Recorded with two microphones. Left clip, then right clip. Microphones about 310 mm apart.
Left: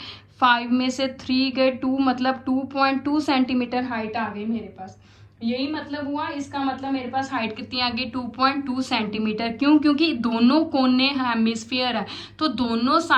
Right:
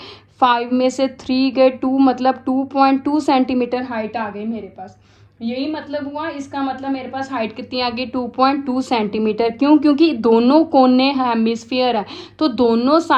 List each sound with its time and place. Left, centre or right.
0.3 s a woman's voice: right